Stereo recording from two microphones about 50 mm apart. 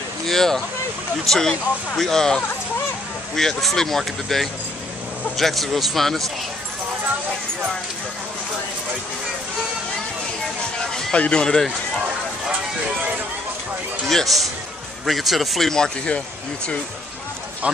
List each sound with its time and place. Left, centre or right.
0.3 s speech: centre
10.8 s a sound: centre
11.1 s speech: left
11.4 s speech: centre
14.0 s speech: centre
15.7 s speech: centre